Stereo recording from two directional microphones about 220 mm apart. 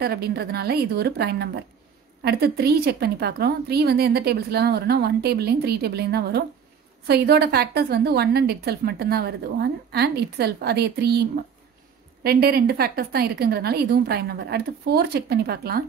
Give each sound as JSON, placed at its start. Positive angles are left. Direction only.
{"t": 0.0, "sound": "a woman's voice", "side_deg": -45}